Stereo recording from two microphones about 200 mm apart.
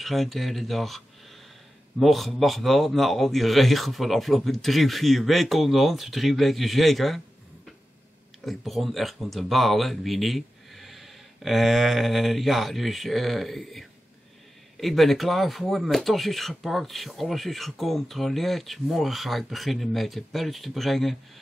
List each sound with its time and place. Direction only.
0.0 s speech: centre (ahead or behind)
8.5 s speech: centre (ahead or behind)